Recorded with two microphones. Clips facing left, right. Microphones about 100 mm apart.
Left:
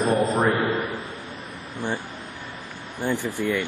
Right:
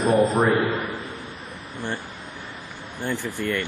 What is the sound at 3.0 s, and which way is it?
Speech, 15° left (ahead or behind).